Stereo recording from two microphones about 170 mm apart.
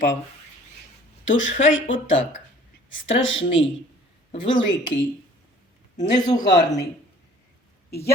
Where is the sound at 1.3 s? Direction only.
90° left.